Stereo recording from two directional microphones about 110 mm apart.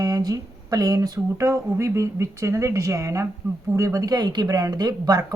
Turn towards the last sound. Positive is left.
turn(degrees=-35)  # may be behind; listen again after turning